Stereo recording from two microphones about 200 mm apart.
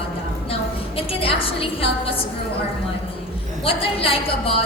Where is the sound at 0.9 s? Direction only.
30° left (ahead or behind).